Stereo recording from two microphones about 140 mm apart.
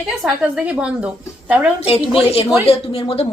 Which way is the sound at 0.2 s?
5° right (ahead or behind).